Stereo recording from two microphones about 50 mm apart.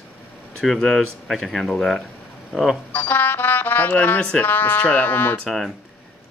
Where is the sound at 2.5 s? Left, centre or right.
Centre.